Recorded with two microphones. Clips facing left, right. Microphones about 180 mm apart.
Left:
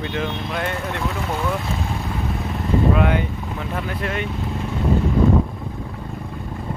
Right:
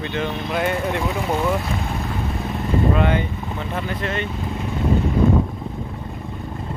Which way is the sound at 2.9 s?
5° left (ahead or behind).